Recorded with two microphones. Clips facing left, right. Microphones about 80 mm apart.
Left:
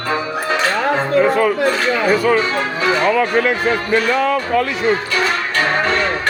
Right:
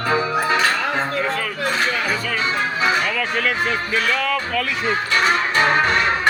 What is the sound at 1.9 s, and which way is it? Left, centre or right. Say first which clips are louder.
Speech: left 9 dB; left.